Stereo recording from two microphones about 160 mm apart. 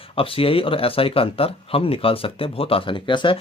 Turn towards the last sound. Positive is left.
turn(degrees=30)  # may be behind; listen again after turning